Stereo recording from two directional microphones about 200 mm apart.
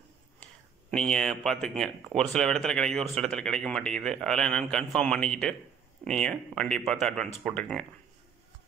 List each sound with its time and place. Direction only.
0.9 s speech: 5° left (ahead or behind)